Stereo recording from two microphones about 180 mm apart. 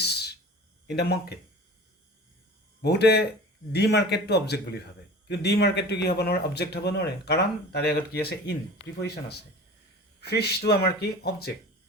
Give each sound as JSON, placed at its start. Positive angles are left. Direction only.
{"t": 0.0, "sound": "a sound", "side_deg": 65}
{"t": 0.9, "sound": "speech", "side_deg": 65}
{"t": 2.8, "sound": "speech", "side_deg": 65}
{"t": 10.2, "sound": "speech", "side_deg": 65}